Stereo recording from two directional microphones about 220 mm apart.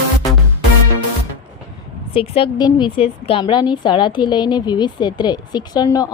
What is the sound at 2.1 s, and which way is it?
A woman's voice, 25° left (ahead or behind).